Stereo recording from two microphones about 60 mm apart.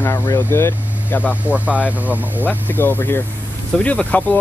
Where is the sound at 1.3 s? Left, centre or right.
Right.